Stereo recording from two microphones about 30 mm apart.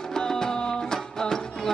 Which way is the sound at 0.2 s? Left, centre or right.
Left.